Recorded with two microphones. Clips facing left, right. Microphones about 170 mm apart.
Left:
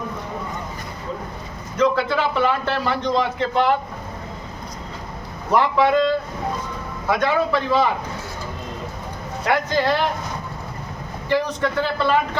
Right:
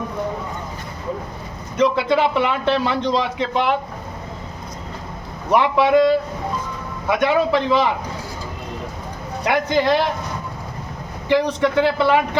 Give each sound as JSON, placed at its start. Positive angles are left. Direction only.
{"t": 1.8, "sound": "a man's voice", "side_deg": -20}
{"t": 5.5, "sound": "a man's voice", "side_deg": -15}
{"t": 9.5, "sound": "a man's voice", "side_deg": -15}
{"t": 11.3, "sound": "a man's voice", "side_deg": -15}